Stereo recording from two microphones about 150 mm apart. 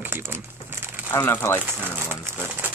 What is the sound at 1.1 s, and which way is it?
Speech, 15° left (ahead or behind).